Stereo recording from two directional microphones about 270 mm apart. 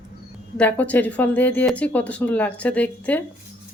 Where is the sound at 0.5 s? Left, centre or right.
Centre.